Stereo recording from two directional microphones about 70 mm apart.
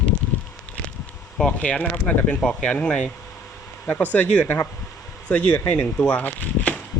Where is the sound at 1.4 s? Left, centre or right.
Centre.